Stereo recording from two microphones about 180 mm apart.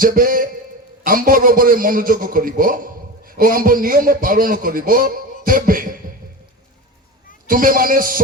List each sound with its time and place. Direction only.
0.0 s a man's voice: 50° right (ahead or behind)
7.4 s a man's voice: 50° right (ahead or behind)